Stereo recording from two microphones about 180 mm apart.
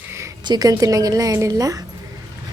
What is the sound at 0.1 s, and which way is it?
A woman's voice, 15° right (ahead or behind).